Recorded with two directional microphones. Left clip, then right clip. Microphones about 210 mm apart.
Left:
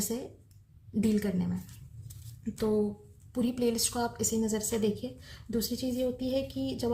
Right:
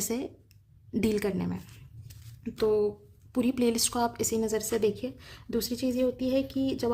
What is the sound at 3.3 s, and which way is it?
A woman's voice, 40° right (ahead or behind).